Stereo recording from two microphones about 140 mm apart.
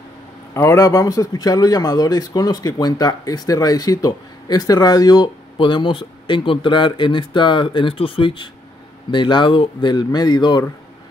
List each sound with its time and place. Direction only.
0.6 s speech: 20° left (ahead or behind)